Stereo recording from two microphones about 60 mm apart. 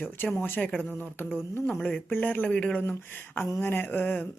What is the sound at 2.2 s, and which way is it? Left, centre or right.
Speech, left.